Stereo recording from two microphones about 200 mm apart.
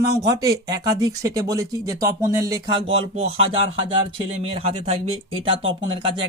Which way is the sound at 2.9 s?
30° right (ahead or behind).